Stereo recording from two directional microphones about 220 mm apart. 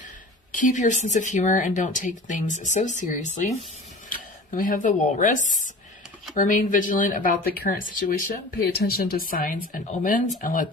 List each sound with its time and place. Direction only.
0.5 s speech: 35° left (ahead or behind)